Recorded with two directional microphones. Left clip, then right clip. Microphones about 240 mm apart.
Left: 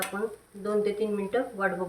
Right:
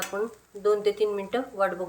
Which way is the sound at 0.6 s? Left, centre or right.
Right.